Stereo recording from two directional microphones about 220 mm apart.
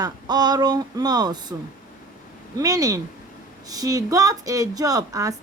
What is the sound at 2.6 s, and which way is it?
Speech, 15° right (ahead or behind).